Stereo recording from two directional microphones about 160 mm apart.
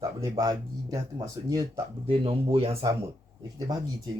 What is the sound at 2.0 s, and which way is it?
Speech, 35° right (ahead or behind).